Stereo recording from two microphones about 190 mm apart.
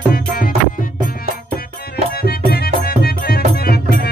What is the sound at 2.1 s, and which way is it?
Music, 55° left (ahead or behind).